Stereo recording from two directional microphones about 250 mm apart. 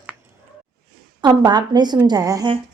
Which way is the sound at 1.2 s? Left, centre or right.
Centre.